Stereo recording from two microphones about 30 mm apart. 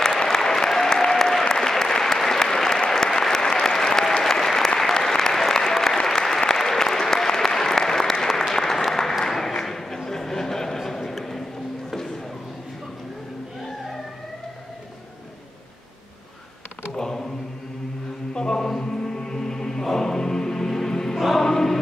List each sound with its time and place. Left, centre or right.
0.3 s applause: centre
9.3 s a sound: centre
16.9 s mantra: centre
18.3 s chant: left
18.8 s music: left
21.2 s music: centre
21.5 s choir: centre